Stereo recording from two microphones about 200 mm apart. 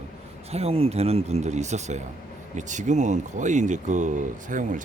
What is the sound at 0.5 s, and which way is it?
A man's voice, 30° right (ahead or behind).